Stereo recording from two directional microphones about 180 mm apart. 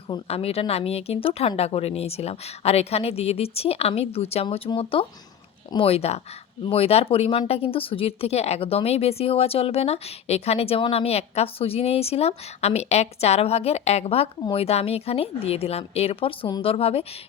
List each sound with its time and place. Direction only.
0.1 s speech: 35° left (ahead or behind)